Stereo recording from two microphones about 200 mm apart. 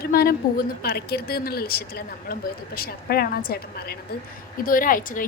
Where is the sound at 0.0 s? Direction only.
50° left (ahead or behind).